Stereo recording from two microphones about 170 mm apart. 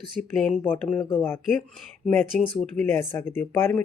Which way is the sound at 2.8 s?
15° left (ahead or behind).